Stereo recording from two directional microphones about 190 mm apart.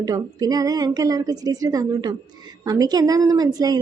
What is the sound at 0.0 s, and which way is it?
A woman's voice, 20° right (ahead or behind).